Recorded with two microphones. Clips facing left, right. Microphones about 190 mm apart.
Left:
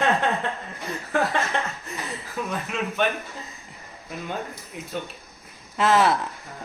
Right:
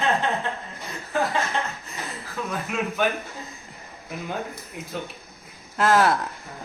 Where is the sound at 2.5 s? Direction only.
5° right (ahead or behind).